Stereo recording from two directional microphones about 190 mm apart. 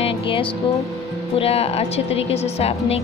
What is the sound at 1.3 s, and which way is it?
Speech, 30° left (ahead or behind).